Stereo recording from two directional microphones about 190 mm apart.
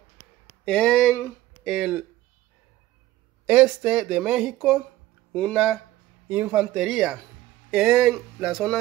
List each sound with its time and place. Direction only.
0.7 s speech: 5° left (ahead or behind)
3.4 s speech: 5° right (ahead or behind)